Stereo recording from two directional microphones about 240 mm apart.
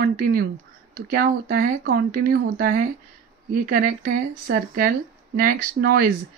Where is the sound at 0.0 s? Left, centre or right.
Right.